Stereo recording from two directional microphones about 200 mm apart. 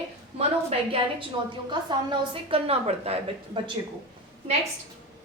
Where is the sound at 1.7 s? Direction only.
25° right (ahead or behind).